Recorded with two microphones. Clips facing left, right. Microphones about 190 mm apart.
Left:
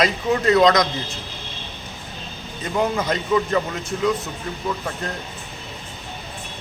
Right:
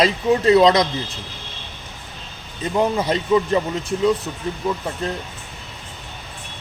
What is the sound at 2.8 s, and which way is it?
Speech, 30° right (ahead or behind).